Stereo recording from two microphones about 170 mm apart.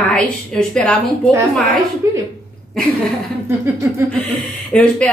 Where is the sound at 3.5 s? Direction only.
15° right (ahead or behind).